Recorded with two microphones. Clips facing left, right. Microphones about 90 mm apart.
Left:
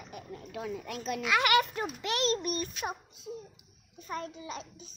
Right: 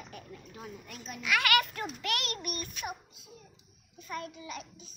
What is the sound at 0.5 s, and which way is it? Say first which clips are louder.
Speech: left 10 dB; 90° left.